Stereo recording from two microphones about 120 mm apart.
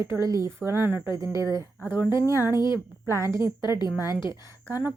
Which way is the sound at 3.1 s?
25° right (ahead or behind).